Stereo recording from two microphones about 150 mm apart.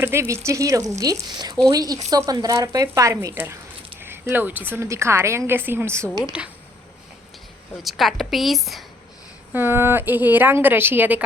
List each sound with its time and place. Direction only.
0.0 s a woman's voice: 15° right (ahead or behind)
7.8 s a woman's voice: centre (ahead or behind)
9.5 s a woman's voice: 15° right (ahead or behind)